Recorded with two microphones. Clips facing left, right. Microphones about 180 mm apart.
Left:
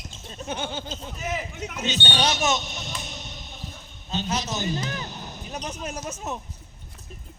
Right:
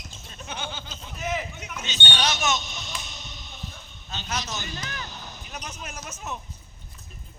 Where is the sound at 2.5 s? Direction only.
60° left (ahead or behind).